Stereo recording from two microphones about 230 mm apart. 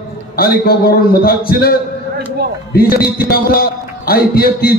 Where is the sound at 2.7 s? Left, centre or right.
Left.